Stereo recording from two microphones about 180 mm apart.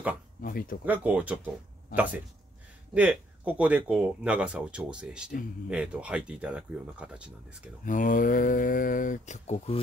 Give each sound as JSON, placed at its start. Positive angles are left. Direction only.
{"t": 0.4, "sound": "speech", "side_deg": 55}
{"t": 0.8, "sound": "speech", "side_deg": -10}
{"t": 2.9, "sound": "speech", "side_deg": -5}
{"t": 7.8, "sound": "speech", "side_deg": 45}